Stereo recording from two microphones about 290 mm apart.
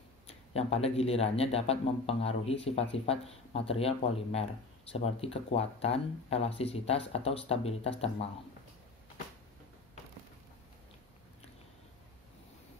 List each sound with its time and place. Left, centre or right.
0.3 s speech: left